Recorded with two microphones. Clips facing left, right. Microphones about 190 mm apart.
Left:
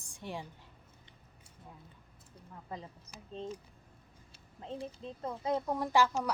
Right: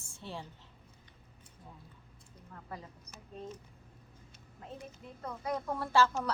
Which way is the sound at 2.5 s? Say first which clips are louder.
Left 2 dB; 15° left (ahead or behind).